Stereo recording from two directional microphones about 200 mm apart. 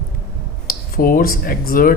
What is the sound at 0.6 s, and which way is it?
Speech, 45° left (ahead or behind).